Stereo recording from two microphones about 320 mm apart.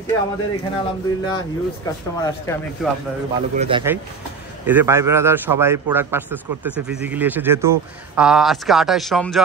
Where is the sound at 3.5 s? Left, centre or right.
Centre.